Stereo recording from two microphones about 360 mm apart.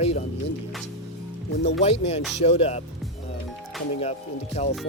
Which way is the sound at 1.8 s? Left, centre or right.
Centre.